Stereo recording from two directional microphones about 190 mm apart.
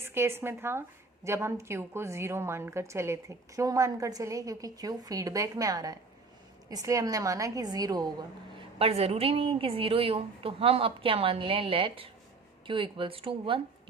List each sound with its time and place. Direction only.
0.0 s a woman's voice: 10° right (ahead or behind)
8.8 s a woman's voice: 35° right (ahead or behind)